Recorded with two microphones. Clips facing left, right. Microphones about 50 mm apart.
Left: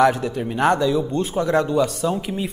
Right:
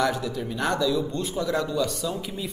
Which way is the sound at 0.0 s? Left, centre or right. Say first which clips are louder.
Left 8 dB; left.